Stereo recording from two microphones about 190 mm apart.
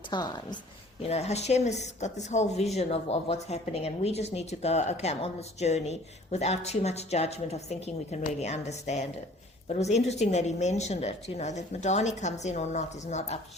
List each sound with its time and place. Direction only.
0.1 s a woman's voice: 20° left (ahead or behind)
1.0 s speech: 35° left (ahead or behind)